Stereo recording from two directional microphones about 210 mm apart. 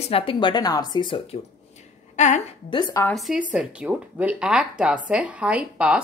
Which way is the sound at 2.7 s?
20° left (ahead or behind).